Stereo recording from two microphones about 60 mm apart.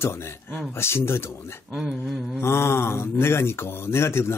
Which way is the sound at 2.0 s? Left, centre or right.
Centre.